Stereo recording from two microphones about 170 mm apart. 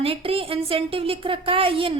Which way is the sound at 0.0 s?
35° right (ahead or behind).